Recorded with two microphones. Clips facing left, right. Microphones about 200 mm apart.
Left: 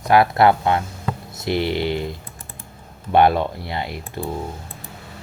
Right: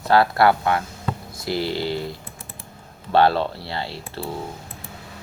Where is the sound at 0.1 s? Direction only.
20° left (ahead or behind).